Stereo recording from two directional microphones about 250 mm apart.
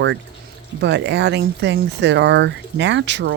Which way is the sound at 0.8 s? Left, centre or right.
Right.